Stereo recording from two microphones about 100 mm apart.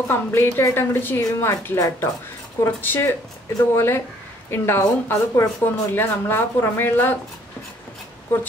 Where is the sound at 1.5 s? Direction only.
35° left (ahead or behind).